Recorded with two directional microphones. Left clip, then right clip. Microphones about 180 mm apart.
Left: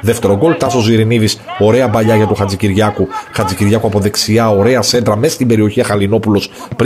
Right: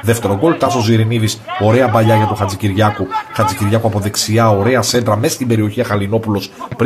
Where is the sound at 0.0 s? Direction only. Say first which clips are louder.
Left 3 dB; 35° left (ahead or behind).